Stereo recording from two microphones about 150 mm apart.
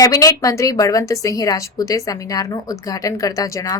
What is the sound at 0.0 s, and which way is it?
A woman's voice, 20° left (ahead or behind).